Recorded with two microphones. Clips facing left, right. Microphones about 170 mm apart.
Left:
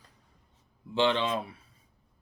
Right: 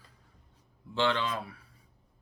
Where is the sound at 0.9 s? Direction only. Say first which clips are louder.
Left 3 dB; 20° left (ahead or behind).